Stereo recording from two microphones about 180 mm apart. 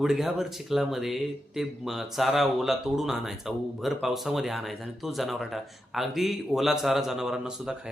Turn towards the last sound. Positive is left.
turn(degrees=-5)  # may be behind; listen again after turning